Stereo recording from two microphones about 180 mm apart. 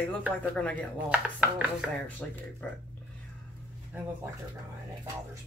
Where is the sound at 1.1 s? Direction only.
10° right (ahead or behind).